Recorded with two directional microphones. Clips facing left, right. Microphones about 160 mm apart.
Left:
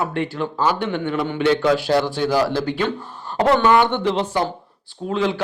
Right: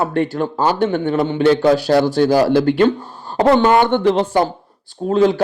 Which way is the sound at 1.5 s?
40° right (ahead or behind).